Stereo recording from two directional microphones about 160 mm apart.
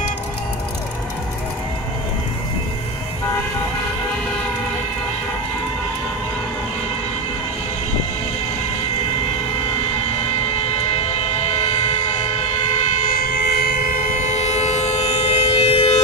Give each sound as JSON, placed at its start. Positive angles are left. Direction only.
{"t": 13.1, "sound": "train", "side_deg": 75}